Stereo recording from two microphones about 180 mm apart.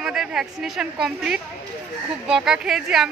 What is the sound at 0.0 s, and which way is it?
Speech, 5° right (ahead or behind).